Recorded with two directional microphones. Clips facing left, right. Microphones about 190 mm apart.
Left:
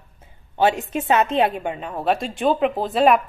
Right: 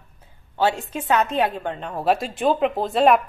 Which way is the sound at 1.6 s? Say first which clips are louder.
Even; 5° left (ahead or behind).